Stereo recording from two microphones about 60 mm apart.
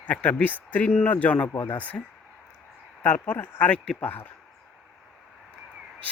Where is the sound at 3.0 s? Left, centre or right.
Left.